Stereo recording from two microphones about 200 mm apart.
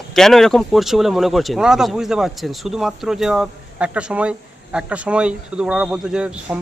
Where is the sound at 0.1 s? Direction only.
Centre (ahead or behind).